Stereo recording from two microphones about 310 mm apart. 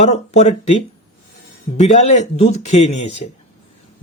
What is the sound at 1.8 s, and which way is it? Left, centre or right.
Speech, left.